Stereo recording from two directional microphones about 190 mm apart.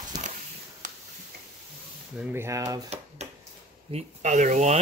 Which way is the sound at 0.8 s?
40° right (ahead or behind).